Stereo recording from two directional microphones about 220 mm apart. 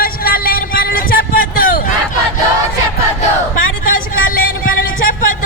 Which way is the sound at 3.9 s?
65° left (ahead or behind).